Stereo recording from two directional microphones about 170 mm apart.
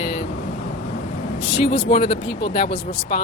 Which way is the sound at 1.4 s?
35° left (ahead or behind).